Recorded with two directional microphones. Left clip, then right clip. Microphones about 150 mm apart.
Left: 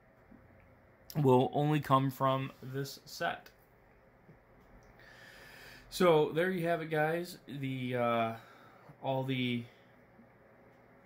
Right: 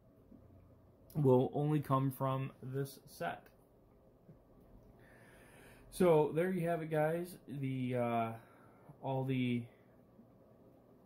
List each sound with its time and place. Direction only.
1.2 s speech: 25° left (ahead or behind)
5.9 s speech: 25° left (ahead or behind)